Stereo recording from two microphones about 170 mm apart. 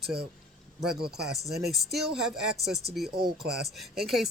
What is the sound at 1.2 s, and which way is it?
Speech, centre (ahead or behind).